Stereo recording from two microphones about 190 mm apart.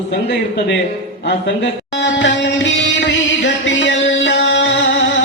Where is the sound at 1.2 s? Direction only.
70° left (ahead or behind).